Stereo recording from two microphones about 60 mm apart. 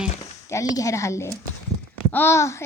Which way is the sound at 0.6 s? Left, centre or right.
Left.